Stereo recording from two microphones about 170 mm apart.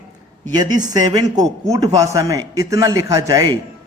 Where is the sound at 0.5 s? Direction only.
25° right (ahead or behind).